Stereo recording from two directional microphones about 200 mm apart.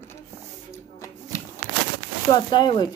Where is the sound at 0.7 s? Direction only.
15° left (ahead or behind).